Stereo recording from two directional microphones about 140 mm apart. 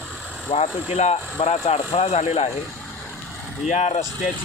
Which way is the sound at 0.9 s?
50° left (ahead or behind).